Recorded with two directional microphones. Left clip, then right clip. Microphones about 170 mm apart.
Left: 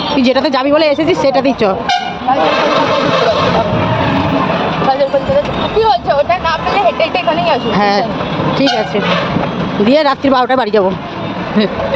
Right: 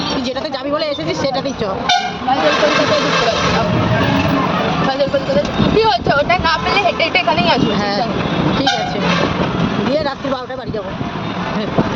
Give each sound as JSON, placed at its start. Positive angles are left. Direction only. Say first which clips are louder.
{"t": 0.2, "sound": "speech", "louder": "left 9 dB", "side_deg": 50}
{"t": 7.8, "sound": "speech", "louder": "left 6 dB", "side_deg": 50}
{"t": 9.9, "sound": "speech", "louder": "left 12 dB", "side_deg": 60}